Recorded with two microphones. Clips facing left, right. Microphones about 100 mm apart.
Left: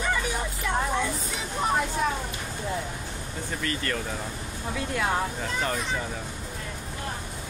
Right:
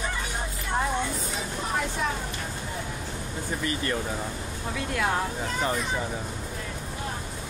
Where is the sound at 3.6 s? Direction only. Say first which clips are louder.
Right 1 dB; 20° right (ahead or behind).